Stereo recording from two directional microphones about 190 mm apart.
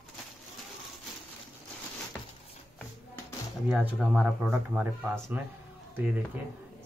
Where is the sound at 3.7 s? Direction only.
5° right (ahead or behind).